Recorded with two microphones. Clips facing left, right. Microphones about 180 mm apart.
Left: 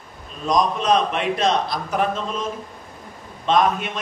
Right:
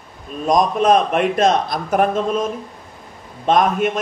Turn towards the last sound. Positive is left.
turn(degrees=-50)  # may be behind; listen again after turning